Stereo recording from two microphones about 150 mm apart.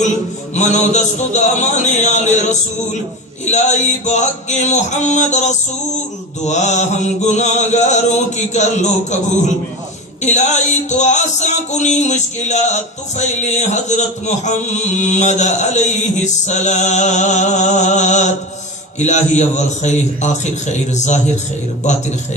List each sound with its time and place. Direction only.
0.5 s music: 50° left (ahead or behind)
10.2 s music: 50° left (ahead or behind)